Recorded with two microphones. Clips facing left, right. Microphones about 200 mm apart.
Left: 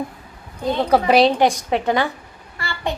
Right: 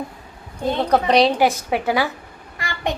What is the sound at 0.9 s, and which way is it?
Speech, 5° left (ahead or behind).